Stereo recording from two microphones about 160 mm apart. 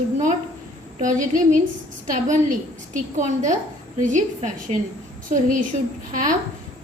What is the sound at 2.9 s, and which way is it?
A woman's voice, 50° right (ahead or behind).